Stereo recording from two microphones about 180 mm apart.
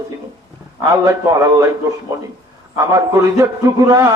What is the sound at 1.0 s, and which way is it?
A man's voice, 20° right (ahead or behind).